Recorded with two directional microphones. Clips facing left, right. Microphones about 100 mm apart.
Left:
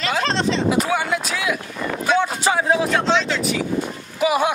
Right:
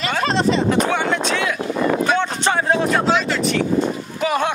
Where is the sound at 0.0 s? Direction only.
5° right (ahead or behind).